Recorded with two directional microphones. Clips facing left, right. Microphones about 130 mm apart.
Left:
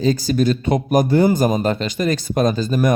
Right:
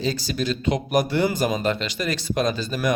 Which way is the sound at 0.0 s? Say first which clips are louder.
Left 8 dB; 45° left (ahead or behind).